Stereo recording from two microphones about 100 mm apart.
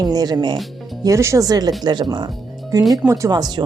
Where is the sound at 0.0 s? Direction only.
40° right (ahead or behind).